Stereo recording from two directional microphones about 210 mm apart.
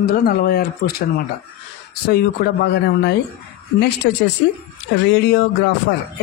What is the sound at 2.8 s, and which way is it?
Speech, 50° left (ahead or behind).